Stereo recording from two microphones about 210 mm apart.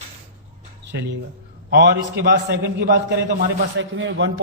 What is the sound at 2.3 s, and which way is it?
A man's voice, 55° right (ahead or behind).